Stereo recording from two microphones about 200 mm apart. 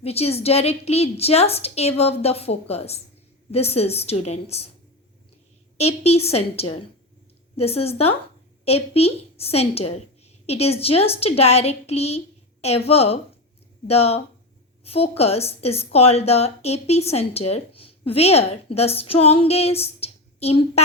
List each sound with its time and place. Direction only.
0.0 s a woman's voice: 30° left (ahead or behind)
6.0 s a woman's voice: 30° left (ahead or behind)